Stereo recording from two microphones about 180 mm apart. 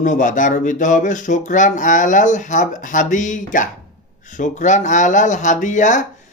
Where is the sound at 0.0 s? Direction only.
45° left (ahead or behind).